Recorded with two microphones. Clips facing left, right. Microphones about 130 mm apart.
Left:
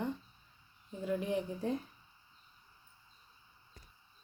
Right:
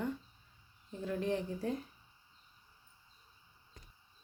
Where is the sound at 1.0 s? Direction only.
15° left (ahead or behind).